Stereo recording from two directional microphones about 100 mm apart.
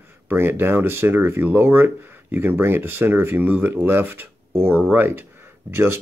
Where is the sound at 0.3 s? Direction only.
20° right (ahead or behind).